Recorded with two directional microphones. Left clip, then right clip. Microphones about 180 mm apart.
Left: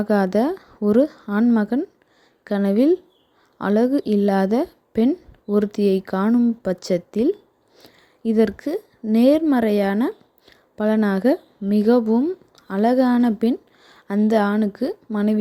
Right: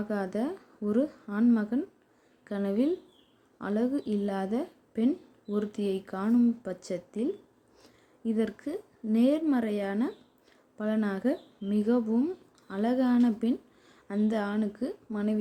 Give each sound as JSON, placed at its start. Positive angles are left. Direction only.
{"t": 0.0, "sound": "a woman's voice", "side_deg": 45}